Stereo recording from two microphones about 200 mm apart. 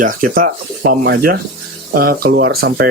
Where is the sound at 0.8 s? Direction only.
55° right (ahead or behind).